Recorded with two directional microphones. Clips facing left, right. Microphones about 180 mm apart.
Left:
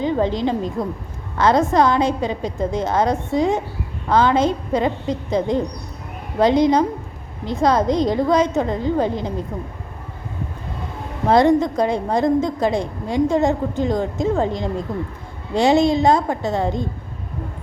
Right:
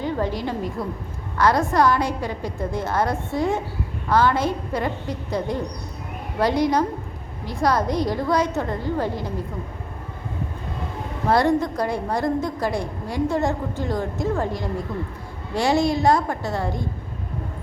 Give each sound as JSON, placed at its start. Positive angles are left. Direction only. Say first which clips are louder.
{"t": 0.0, "sound": "a woman's voice", "louder": "left 5 dB", "side_deg": 20}
{"t": 11.3, "sound": "a woman's voice", "louder": "left 5 dB", "side_deg": 20}